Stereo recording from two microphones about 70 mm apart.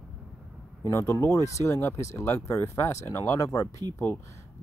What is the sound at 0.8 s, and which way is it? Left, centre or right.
Speech, left.